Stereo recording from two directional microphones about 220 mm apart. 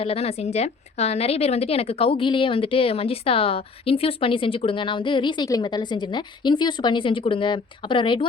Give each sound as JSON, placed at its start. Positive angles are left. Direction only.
{"t": 0.0, "sound": "a woman's voice", "side_deg": 25}